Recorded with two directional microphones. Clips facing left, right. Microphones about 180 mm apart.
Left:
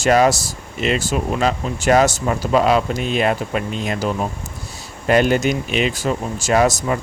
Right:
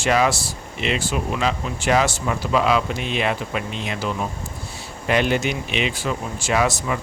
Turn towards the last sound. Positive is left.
turn(degrees=45)  # may be behind; listen again after turning